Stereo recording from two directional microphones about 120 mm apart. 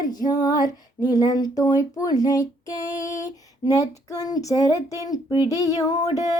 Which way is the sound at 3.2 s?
30° left (ahead or behind).